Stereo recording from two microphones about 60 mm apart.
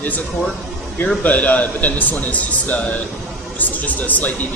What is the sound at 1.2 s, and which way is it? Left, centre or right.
A man's voice, left.